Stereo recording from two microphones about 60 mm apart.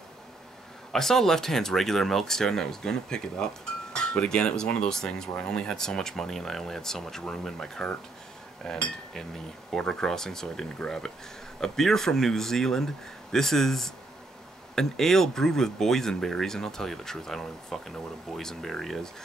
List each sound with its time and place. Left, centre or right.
0.9 s speech: centre
8.6 s cutlery: centre
9.7 s speech: centre